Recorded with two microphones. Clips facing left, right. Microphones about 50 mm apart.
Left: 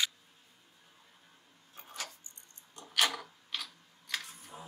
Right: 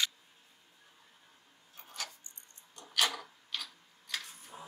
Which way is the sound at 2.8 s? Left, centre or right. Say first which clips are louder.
Left 1 dB; centre.